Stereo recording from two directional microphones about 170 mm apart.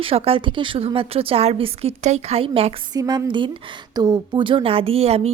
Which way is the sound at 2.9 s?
20° right (ahead or behind).